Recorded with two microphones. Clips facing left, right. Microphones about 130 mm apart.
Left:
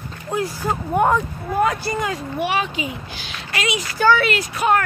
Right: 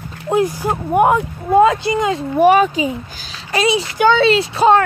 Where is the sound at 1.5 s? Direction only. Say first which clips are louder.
Right 8 dB; 20° right (ahead or behind).